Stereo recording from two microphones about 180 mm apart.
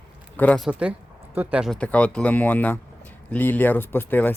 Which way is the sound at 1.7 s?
5° left (ahead or behind).